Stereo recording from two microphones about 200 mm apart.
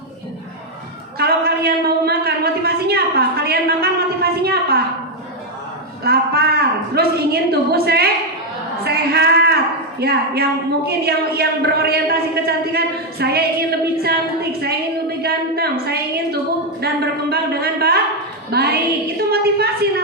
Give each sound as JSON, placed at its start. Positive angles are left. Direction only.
{"t": 1.2, "sound": "a sound", "side_deg": -55}
{"t": 6.0, "sound": "a man's voice", "side_deg": -50}
{"t": 15.2, "sound": "a woman's voice", "side_deg": -55}